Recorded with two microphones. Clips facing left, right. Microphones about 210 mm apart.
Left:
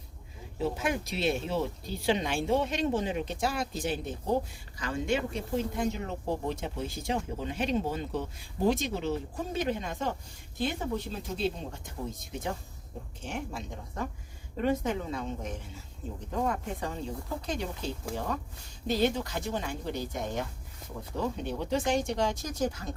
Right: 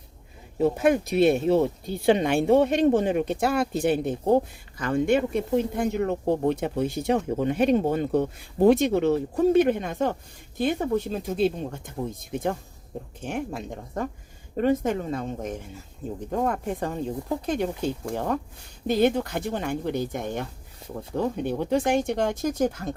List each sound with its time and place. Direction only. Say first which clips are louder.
0.6 s speech: right 10 dB; 55° right (ahead or behind)